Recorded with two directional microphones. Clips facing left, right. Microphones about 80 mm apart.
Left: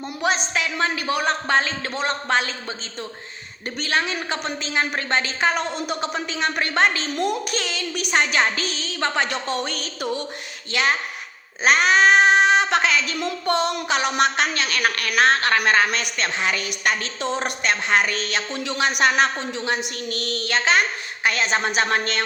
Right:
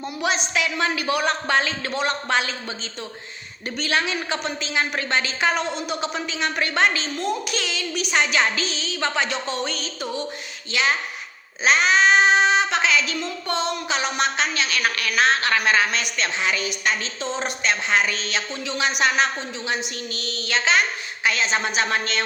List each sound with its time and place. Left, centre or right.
0.2 s a woman's voice: left
3.8 s a woman's voice: left